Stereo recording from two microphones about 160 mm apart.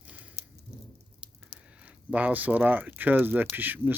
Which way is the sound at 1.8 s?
10° right (ahead or behind).